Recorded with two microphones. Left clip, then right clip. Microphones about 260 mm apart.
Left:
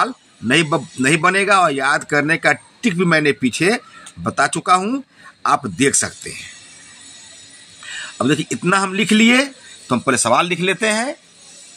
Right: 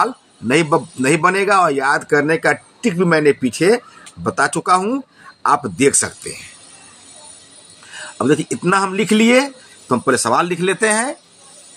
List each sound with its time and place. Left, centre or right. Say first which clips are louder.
0.0 s speech: right 2 dB; centre
8.2 s speech: right 2 dB; centre